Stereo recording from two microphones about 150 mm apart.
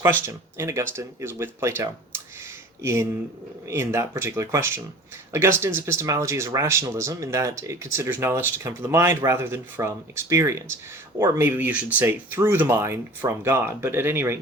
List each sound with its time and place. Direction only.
0.0 s speech: 20° right (ahead or behind)